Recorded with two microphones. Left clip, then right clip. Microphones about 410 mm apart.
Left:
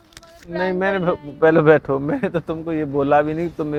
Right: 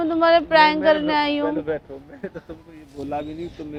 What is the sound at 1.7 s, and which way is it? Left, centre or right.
Speech, left.